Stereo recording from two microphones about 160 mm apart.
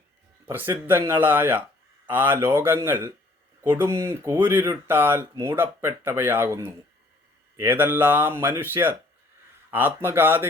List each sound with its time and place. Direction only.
0.4 s speech: 15° right (ahead or behind)